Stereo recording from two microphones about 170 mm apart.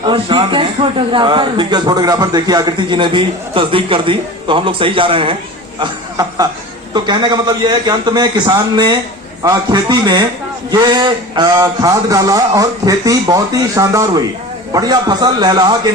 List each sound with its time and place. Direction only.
0.0 s a man's voice: 30° right (ahead or behind)
5.8 s a man's voice: 20° right (ahead or behind)